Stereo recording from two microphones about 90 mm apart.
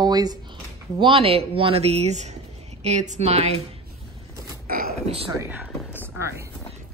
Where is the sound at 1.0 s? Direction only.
80° right.